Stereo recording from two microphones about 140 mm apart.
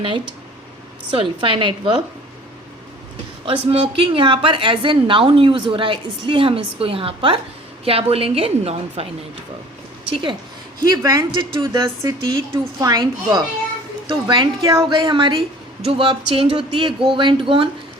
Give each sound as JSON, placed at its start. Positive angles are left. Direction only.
{"t": 1.1, "sound": "a woman's voice", "side_deg": -35}
{"t": 3.4, "sound": "a woman's voice", "side_deg": -40}
{"t": 10.8, "sound": "a woman's voice", "side_deg": -30}